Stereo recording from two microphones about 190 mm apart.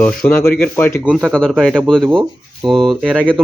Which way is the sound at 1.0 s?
Centre (ahead or behind).